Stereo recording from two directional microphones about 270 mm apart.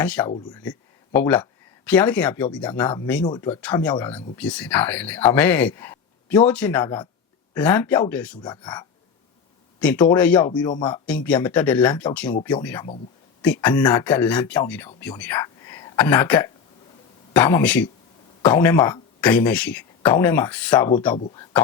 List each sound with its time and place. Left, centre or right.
0.0 s speech: centre
8.4 s speech: centre
9.8 s speech: centre
10.5 s speech: centre
10.8 s speech: centre